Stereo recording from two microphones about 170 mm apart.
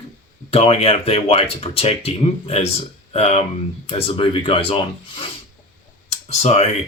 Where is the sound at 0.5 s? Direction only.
35° left (ahead or behind).